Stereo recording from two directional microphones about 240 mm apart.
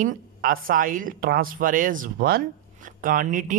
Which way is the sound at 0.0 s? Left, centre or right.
Right.